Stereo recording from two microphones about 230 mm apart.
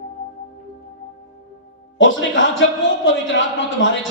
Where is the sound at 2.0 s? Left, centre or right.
Left.